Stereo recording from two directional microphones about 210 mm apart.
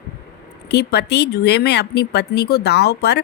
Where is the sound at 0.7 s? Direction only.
50° left (ahead or behind).